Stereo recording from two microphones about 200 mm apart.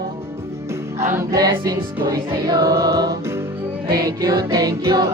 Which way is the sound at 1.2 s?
20° right (ahead or behind).